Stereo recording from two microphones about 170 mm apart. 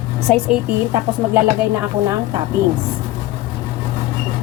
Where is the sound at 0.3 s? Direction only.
5° left (ahead or behind).